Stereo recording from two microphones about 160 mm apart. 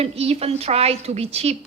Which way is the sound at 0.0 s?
40° right (ahead or behind).